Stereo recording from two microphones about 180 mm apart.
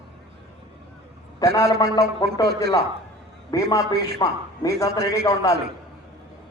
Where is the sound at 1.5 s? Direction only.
20° left (ahead or behind).